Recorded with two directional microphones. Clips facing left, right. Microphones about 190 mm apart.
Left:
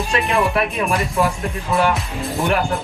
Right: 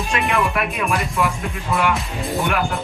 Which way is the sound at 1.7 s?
Centre (ahead or behind).